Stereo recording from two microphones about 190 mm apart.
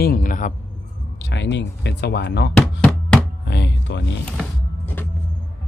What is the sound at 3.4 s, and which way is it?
Speech, 65° left (ahead or behind).